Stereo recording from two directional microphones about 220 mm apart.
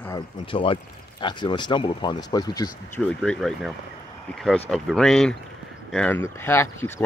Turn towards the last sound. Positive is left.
turn(degrees=10)  # may be behind; listen again after turning